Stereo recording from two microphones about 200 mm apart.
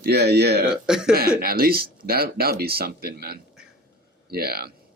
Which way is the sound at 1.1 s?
50° right (ahead or behind).